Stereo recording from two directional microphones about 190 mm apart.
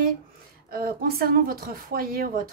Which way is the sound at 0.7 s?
50° right (ahead or behind).